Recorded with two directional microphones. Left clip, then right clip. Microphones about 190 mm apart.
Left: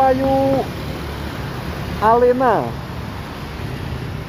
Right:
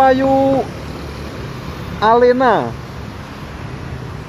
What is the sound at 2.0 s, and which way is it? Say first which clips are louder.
Speech: right 3 dB; 15° right (ahead or behind).